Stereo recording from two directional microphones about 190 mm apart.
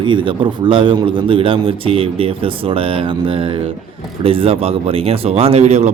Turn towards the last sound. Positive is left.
turn(degrees=-35)  # may be behind; listen again after turning